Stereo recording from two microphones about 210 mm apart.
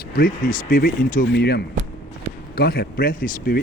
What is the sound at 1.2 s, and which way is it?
Speech, 55° left (ahead or behind).